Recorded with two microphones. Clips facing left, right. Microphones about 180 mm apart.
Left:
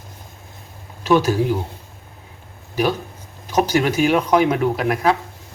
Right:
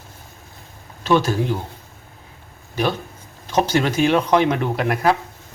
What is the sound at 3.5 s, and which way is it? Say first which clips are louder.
Speech: left 1 dB; 10° left (ahead or behind).